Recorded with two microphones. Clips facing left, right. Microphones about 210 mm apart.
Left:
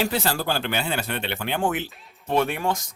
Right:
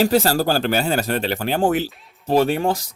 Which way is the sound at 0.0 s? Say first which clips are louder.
Right 8 dB; 40° right (ahead or behind).